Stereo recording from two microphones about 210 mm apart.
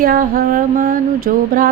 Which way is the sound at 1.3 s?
45° right (ahead or behind).